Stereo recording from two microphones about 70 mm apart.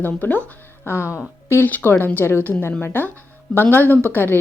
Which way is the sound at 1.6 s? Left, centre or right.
Left.